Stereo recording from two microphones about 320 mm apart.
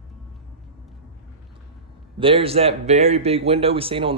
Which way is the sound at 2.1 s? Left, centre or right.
Centre.